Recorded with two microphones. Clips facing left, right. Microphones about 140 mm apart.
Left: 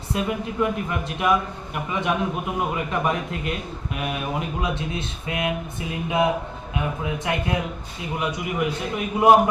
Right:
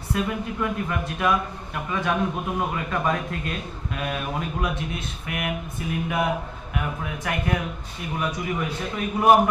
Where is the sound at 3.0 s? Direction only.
20° left (ahead or behind).